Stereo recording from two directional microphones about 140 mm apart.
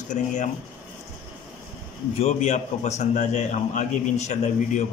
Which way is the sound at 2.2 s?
55° left (ahead or behind).